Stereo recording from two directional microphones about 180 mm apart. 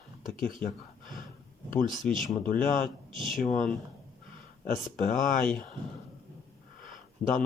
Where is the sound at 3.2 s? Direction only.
Centre (ahead or behind).